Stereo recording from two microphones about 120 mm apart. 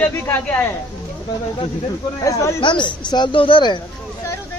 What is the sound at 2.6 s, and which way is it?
A woman's voice, 40° left (ahead or behind).